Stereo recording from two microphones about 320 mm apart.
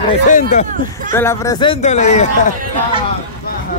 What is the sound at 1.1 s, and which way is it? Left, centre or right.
Speech, centre.